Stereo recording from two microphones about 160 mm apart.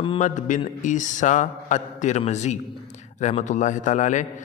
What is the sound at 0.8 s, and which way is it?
A man's voice, 50° left (ahead or behind).